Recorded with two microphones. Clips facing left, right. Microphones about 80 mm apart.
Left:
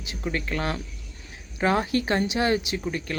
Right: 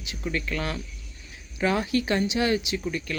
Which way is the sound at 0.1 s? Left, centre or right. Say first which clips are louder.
Left 1 dB; left.